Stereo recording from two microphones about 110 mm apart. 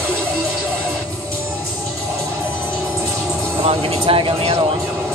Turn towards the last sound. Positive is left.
turn(degrees=-60)  # may be behind; listen again after turning